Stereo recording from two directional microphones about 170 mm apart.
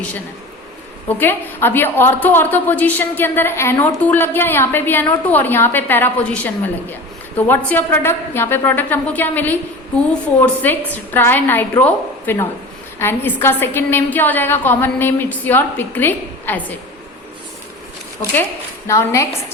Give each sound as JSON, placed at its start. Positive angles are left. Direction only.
{"t": 1.0, "sound": "a woman's voice", "side_deg": 10}
{"t": 18.9, "sound": "a woman's voice", "side_deg": 15}